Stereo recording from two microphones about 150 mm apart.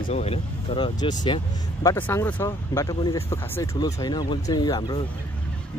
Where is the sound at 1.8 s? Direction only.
15° left (ahead or behind).